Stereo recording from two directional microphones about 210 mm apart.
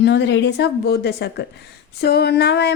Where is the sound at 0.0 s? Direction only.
55° left (ahead or behind).